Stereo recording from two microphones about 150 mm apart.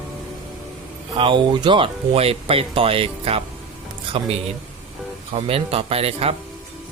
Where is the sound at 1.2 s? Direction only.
35° right (ahead or behind).